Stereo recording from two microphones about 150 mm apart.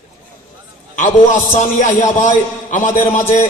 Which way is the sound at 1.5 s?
55° left (ahead or behind).